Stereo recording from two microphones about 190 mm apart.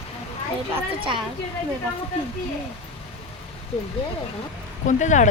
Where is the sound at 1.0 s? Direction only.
25° right (ahead or behind).